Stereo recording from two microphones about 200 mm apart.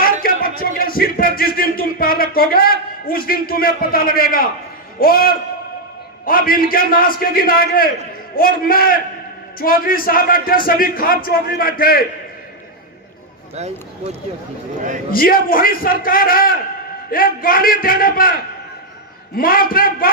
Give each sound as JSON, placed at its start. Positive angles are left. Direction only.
{"t": 0.0, "sound": "music", "side_deg": 45}
{"t": 4.9, "sound": "a man's voice", "side_deg": 45}
{"t": 15.1, "sound": "a man's voice", "side_deg": 45}
{"t": 19.4, "sound": "a man's voice", "side_deg": 45}